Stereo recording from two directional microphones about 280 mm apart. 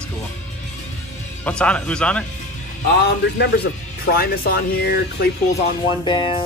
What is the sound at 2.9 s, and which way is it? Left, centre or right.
A man's voice, left.